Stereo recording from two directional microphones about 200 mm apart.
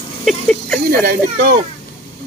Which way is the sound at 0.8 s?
50° right (ahead or behind).